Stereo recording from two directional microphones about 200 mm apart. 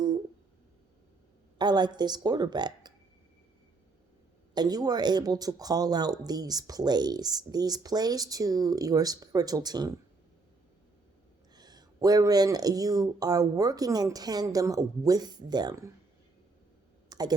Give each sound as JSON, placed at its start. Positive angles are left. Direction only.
{"t": 1.5, "sound": "speech", "side_deg": -20}
{"t": 4.5, "sound": "speech", "side_deg": -20}
{"t": 11.5, "sound": "speech", "side_deg": -20}
{"t": 17.1, "sound": "clicking", "side_deg": -20}